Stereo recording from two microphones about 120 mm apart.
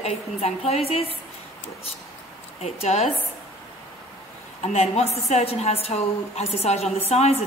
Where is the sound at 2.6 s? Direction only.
65° left (ahead or behind).